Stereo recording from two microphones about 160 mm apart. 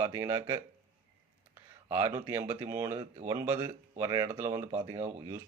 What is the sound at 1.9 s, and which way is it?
Speech, 15° right (ahead or behind).